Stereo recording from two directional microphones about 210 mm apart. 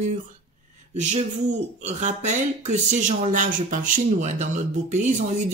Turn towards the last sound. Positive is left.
turn(degrees=-35)  # may be behind; listen again after turning